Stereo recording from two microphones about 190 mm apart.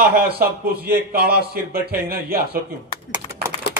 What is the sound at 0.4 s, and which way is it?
A man's voice, 55° right (ahead or behind).